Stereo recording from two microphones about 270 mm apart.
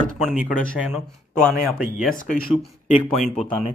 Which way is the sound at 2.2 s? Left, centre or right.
Left.